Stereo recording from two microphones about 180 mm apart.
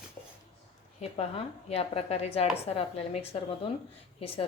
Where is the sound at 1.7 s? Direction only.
35° left (ahead or behind).